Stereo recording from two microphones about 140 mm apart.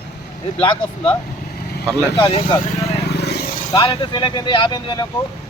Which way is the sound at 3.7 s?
30° left (ahead or behind).